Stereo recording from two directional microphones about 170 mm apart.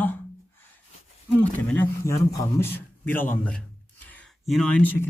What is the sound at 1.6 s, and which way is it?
A man's voice, 10° left (ahead or behind).